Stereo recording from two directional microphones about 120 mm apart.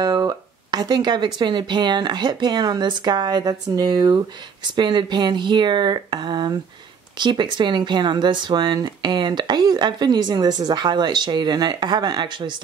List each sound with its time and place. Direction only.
0.0 s speech: 30° right (ahead or behind)